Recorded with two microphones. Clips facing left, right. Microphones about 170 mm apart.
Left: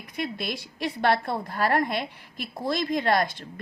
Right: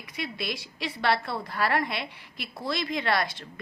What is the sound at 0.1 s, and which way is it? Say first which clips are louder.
Speech: left 3 dB; 50° left (ahead or behind).